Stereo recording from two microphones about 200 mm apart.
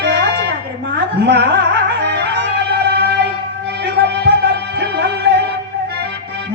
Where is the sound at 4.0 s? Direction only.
60° right (ahead or behind).